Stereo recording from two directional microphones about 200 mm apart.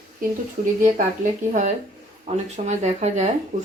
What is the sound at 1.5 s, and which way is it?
Speech, 35° right (ahead or behind).